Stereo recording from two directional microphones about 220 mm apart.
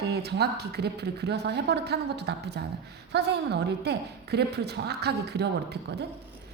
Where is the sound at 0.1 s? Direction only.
50° right (ahead or behind).